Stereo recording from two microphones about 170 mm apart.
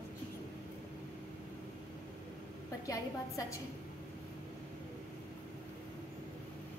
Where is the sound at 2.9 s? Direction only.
20° left (ahead or behind).